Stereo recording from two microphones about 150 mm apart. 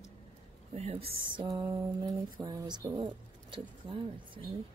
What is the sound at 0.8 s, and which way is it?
Speech, 40° right (ahead or behind).